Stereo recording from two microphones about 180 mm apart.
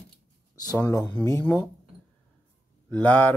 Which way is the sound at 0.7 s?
10° left (ahead or behind).